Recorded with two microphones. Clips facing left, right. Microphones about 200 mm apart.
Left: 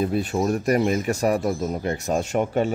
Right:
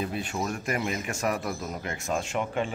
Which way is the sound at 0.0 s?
40° left (ahead or behind).